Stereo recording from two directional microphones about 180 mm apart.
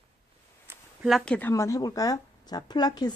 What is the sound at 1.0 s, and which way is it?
A woman's voice, centre (ahead or behind).